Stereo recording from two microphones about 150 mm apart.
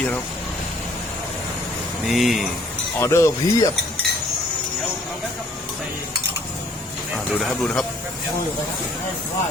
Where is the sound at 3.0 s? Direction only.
20° left (ahead or behind).